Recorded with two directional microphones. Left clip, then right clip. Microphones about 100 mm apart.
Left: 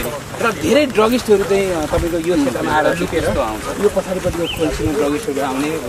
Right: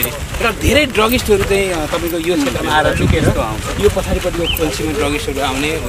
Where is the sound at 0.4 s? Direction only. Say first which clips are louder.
Right 1 dB; 15° right (ahead or behind).